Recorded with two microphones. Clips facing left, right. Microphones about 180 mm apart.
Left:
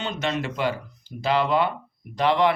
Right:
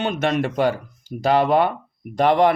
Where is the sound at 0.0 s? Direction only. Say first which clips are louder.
Right 6 dB; 55° right (ahead or behind).